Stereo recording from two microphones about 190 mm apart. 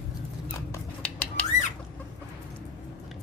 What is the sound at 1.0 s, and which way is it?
Squawk, 5° left (ahead or behind).